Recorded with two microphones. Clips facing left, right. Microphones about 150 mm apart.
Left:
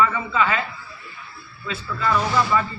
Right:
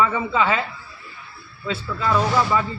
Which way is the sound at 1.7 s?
20° right (ahead or behind).